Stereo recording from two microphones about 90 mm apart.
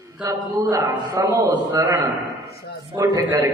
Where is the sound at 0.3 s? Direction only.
40° right (ahead or behind).